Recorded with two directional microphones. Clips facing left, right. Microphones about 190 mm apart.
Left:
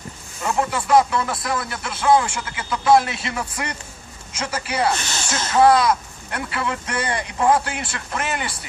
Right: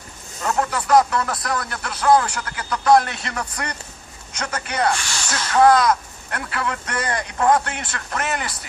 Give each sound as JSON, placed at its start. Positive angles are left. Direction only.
{"t": 0.4, "sound": "speech", "side_deg": 5}
{"t": 4.9, "sound": "speech", "side_deg": 20}
{"t": 5.6, "sound": "speech", "side_deg": 5}